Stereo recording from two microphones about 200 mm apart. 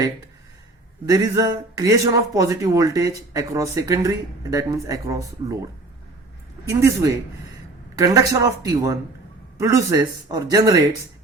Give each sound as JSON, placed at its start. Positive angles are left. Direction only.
{"t": 1.0, "sound": "speech", "side_deg": -20}
{"t": 6.7, "sound": "speech", "side_deg": -15}